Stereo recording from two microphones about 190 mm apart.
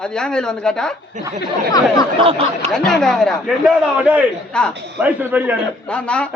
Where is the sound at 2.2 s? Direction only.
30° right (ahead or behind).